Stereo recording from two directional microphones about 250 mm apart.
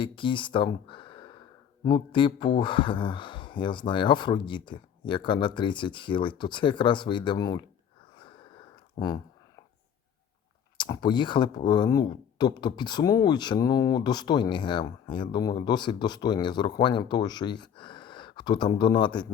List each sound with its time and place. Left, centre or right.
0.0 s speech: centre
8.2 s a sound: centre
10.8 s speech: centre